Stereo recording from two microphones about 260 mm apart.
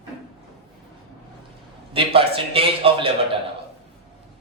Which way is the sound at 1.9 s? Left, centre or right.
Right.